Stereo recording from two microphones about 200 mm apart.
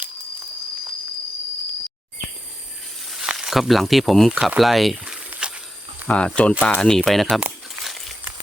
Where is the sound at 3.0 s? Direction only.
Centre (ahead or behind).